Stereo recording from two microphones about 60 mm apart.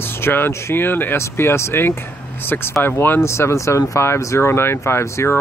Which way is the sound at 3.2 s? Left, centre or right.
Left.